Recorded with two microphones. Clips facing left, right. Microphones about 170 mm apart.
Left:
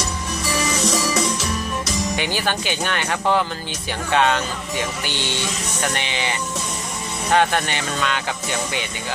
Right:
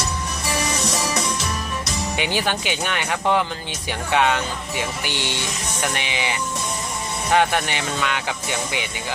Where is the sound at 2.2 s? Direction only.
15° right (ahead or behind).